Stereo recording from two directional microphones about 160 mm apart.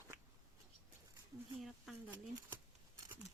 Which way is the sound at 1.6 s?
5° right (ahead or behind).